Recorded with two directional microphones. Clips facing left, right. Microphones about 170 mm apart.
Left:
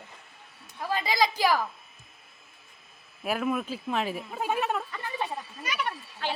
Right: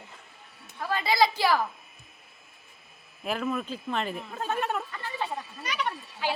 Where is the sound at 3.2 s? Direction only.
5° left (ahead or behind).